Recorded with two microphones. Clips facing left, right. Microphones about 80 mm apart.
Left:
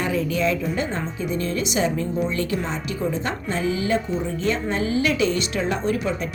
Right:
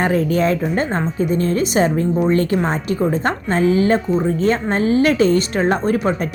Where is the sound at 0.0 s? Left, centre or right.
Right.